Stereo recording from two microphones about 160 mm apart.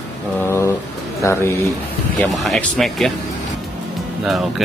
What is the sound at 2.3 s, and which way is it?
Speech, centre (ahead or behind).